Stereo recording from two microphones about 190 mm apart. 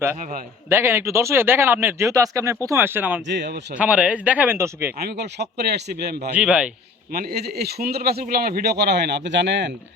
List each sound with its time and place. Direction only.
0.2 s a man's voice: 40° right (ahead or behind)
0.7 s speech: 10° right (ahead or behind)
3.2 s speech: 65° right (ahead or behind)
3.8 s speech: 5° right (ahead or behind)
4.9 s speech: 60° right (ahead or behind)
6.3 s speech: 5° right (ahead or behind)
7.1 s speech: 55° right (ahead or behind)